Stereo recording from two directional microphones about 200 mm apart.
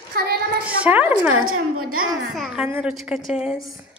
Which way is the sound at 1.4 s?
90° right.